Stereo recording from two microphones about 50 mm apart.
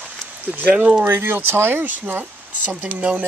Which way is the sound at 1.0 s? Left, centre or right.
Right.